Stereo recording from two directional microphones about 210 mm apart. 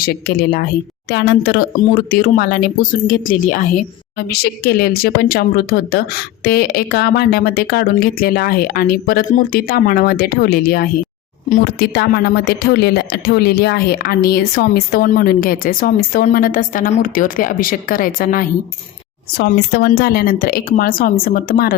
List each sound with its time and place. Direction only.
0.0 s speech: 45° left (ahead or behind)